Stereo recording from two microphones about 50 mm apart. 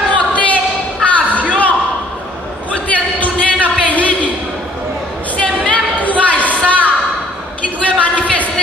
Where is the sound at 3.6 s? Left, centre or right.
Left.